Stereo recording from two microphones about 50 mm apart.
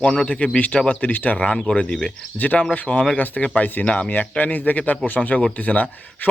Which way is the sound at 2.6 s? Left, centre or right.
Left.